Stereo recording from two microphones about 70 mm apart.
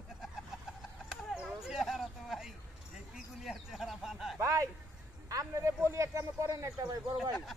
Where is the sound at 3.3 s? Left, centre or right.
Centre.